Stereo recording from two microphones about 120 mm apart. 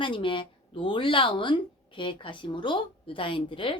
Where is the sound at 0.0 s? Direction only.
45° left (ahead or behind).